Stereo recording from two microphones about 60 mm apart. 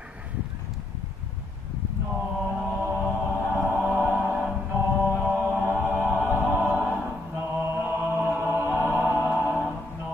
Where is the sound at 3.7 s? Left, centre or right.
Right.